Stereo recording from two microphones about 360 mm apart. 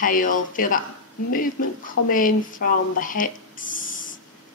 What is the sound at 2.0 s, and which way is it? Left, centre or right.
Speech, left.